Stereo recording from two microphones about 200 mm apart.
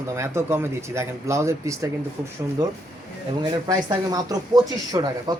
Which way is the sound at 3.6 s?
20° right (ahead or behind).